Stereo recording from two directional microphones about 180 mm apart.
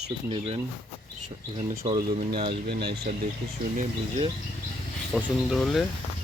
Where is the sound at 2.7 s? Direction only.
65° right (ahead or behind).